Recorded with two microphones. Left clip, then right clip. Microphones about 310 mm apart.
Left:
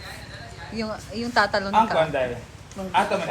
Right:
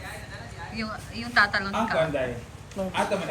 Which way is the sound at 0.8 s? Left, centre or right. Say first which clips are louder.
Left 5 dB; centre.